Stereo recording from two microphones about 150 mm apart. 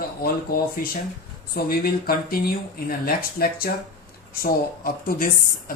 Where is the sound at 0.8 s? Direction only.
70° left (ahead or behind).